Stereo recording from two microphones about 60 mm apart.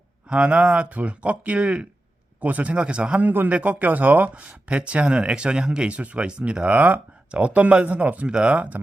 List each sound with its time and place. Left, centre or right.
0.3 s a man's voice: centre